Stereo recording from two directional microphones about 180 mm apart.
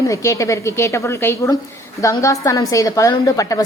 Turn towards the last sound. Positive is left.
turn(degrees=20)  # may be behind; listen again after turning